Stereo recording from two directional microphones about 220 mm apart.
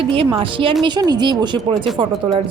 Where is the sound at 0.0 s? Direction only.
25° right (ahead or behind).